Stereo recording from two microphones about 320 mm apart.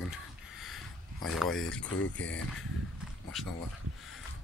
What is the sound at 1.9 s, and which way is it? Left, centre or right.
Speech, left.